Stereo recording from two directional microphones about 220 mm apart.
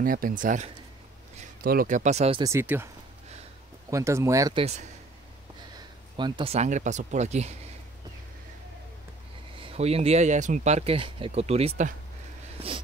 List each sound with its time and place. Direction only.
0.0 s speech: 40° right (ahead or behind)
2.4 s speech: 10° right (ahead or behind)
3.9 s speech: 15° right (ahead or behind)
6.1 s speech: 20° right (ahead or behind)
9.6 s speech: 25° right (ahead or behind)
12.5 s a sound: 25° right (ahead or behind)